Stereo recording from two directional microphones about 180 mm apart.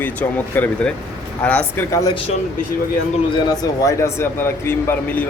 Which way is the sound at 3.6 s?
20° left (ahead or behind).